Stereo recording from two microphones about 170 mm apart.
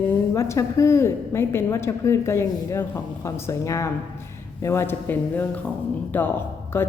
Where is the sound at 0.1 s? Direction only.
15° left (ahead or behind).